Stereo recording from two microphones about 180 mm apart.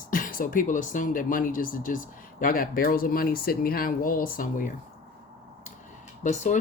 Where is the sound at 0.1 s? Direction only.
50° left (ahead or behind).